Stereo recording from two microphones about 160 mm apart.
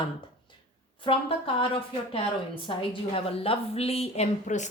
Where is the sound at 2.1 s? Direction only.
35° left (ahead or behind).